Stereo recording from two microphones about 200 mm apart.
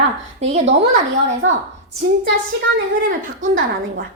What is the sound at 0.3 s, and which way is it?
Speech, 30° right (ahead or behind).